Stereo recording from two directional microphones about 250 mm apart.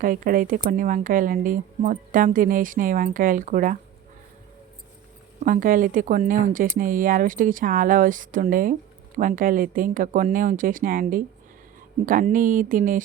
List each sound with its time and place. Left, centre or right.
0.0 s speech: right
5.5 s speech: right